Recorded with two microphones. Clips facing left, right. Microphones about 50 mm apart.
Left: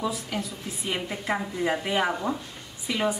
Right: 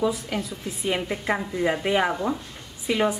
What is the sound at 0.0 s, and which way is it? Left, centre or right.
Speech, centre.